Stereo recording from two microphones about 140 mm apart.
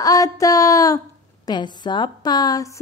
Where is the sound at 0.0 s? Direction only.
25° left (ahead or behind).